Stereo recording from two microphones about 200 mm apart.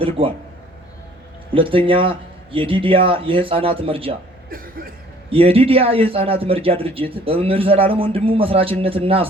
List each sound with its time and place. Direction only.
0.2 s a man's voice: 25° right (ahead or behind)
1.5 s a man's voice: 25° right (ahead or behind)
4.4 s cough: 45° right (ahead or behind)
5.3 s a man's voice: 30° right (ahead or behind)